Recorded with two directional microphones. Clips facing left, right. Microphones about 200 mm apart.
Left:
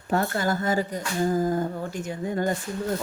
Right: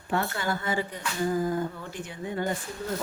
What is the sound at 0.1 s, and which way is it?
A woman's voice, 40° left (ahead or behind).